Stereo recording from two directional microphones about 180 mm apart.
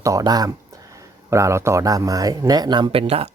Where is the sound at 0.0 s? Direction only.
20° right (ahead or behind).